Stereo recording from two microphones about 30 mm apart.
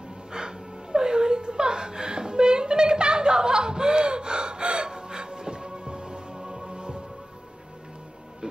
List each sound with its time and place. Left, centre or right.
0.3 s whimper: right